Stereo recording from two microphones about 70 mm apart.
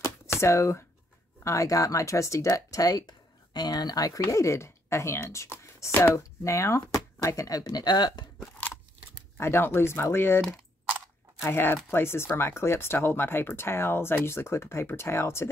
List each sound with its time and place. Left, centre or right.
0.3 s speech: left
9.4 s speech: left
11.4 s speech: left